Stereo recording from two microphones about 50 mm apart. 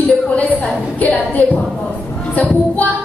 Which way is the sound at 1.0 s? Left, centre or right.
Left.